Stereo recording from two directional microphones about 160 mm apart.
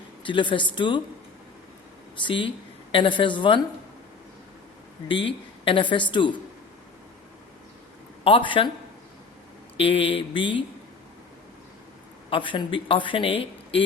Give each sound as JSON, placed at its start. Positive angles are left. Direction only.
{"t": 0.2, "sound": "speech", "side_deg": 30}
{"t": 2.1, "sound": "speech", "side_deg": 30}
{"t": 5.0, "sound": "speech", "side_deg": 30}
{"t": 8.2, "sound": "speech", "side_deg": 35}
{"t": 9.7, "sound": "speech", "side_deg": 35}
{"t": 12.3, "sound": "speech", "side_deg": 30}